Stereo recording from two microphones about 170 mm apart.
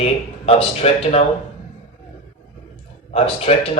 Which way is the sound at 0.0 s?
35° left (ahead or behind).